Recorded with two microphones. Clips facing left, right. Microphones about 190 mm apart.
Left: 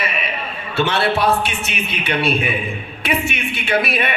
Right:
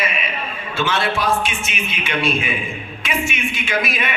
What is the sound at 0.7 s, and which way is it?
Speech, 65° left (ahead or behind).